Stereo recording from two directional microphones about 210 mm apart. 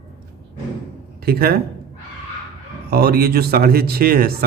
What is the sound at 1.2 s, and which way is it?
Speech, 50° right (ahead or behind).